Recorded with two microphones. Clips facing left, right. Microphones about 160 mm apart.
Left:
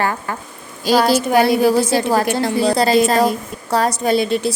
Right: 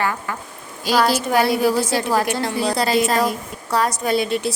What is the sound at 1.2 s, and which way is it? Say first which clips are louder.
A woman's voice: left 4 dB; 20° left (ahead or behind).